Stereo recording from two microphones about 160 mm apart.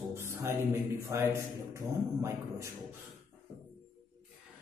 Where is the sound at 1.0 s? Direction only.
20° right (ahead or behind).